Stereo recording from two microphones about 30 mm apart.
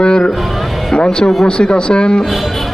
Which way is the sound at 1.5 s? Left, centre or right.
Left.